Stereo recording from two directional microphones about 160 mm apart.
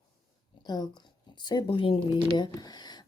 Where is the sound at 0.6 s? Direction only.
25° left (ahead or behind).